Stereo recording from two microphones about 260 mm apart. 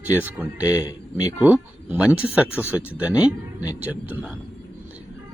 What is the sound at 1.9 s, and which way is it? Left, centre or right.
Speech, centre.